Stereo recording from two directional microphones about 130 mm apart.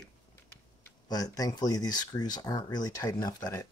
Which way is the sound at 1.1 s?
30° left (ahead or behind).